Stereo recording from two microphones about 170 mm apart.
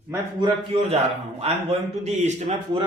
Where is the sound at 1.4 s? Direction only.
35° right (ahead or behind).